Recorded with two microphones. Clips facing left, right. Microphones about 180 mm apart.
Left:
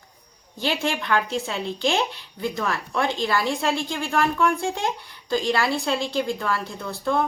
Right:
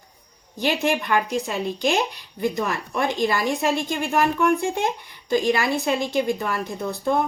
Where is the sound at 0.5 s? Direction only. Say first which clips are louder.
Right 3 dB; 15° right (ahead or behind).